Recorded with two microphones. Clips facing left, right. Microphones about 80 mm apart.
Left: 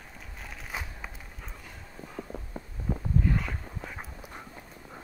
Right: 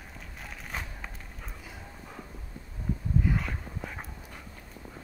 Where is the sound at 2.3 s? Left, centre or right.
Left.